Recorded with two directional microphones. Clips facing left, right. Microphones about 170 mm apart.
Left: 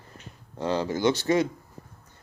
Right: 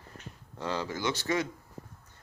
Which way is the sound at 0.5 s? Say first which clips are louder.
Left 7 dB; 20° left (ahead or behind).